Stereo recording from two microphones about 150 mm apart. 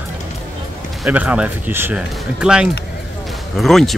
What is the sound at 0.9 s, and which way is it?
Speech, 5° right (ahead or behind).